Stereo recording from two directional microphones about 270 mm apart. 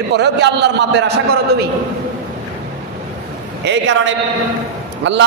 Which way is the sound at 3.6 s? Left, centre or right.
Right.